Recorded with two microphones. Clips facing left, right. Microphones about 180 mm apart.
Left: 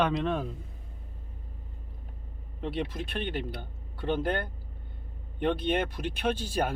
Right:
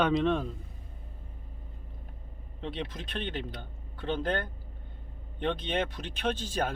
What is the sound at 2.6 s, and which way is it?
Speech, 10° left (ahead or behind).